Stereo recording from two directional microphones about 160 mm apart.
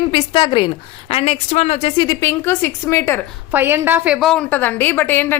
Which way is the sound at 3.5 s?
15° right (ahead or behind).